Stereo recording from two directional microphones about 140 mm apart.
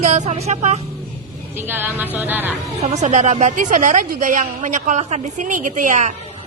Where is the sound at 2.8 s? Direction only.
55° right (ahead or behind).